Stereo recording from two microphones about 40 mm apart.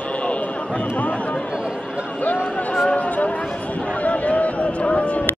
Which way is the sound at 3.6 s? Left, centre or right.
Left.